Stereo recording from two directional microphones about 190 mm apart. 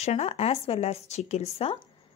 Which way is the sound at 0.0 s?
35° left (ahead or behind).